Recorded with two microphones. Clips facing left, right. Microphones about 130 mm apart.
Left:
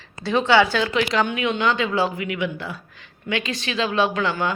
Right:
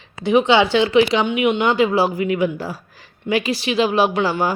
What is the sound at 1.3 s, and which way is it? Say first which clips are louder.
Speech: right 6 dB; 15° right (ahead or behind).